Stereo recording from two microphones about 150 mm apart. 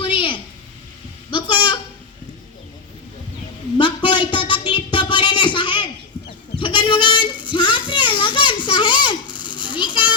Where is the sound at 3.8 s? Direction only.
30° left (ahead or behind).